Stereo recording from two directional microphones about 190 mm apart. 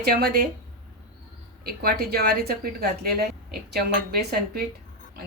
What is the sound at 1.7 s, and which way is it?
A woman's voice, 55° right (ahead or behind).